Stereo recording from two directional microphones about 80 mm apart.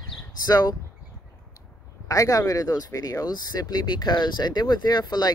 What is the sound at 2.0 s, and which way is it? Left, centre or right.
Speech, left.